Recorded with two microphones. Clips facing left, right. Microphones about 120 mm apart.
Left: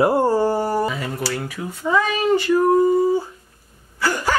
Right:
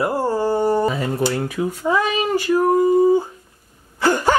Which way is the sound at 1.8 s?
5° right (ahead or behind).